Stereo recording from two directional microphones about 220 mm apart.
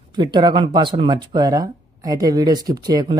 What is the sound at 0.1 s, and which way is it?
Speech, 20° right (ahead or behind).